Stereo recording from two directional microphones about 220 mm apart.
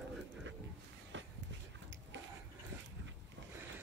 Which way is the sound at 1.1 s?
55° right (ahead or behind).